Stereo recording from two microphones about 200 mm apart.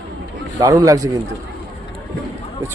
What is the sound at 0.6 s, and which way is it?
Speech, 15° right (ahead or behind).